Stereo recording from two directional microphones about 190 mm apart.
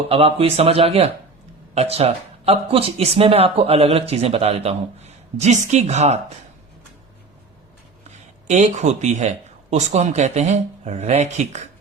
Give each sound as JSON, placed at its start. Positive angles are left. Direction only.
{"t": 0.1, "sound": "speech", "side_deg": -30}
{"t": 8.4, "sound": "speech", "side_deg": -35}